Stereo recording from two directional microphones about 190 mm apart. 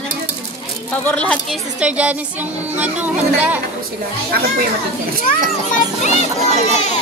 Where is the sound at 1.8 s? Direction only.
5° right (ahead or behind).